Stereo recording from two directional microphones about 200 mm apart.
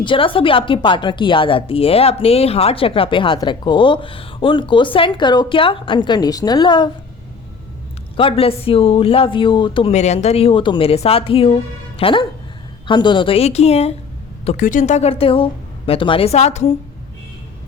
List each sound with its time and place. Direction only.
0.0 s a woman's voice: 25° left (ahead or behind)
8.1 s a woman's voice: 25° left (ahead or behind)